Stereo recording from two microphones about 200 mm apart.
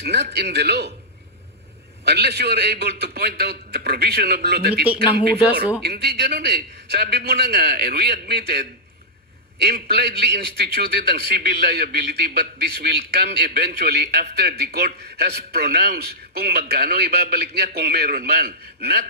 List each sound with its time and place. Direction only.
0.0 s speech: 55° right (ahead or behind)
2.0 s a man's voice: 55° right (ahead or behind)
5.9 s a man's voice: 50° right (ahead or behind)